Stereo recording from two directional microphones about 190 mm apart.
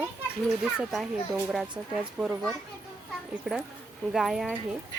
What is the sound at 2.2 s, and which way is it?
Speech, 5° right (ahead or behind).